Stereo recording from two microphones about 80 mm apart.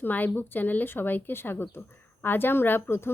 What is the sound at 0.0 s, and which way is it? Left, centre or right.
A woman's voice, left.